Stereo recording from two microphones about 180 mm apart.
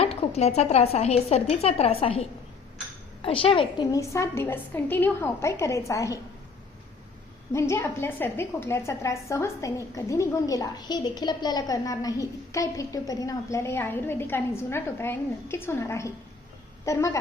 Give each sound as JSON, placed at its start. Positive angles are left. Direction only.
{"t": 0.0, "sound": "a woman's voice", "side_deg": 35}
{"t": 7.5, "sound": "a woman's voice", "side_deg": 15}